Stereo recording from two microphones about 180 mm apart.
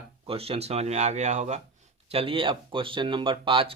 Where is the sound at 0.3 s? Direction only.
30° right (ahead or behind).